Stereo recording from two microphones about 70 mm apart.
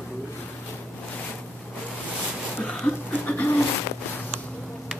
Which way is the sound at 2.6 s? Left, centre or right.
Centre.